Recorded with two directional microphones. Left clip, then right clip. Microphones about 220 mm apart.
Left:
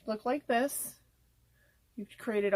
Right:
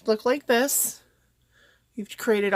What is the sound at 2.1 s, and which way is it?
Speech, 40° right (ahead or behind).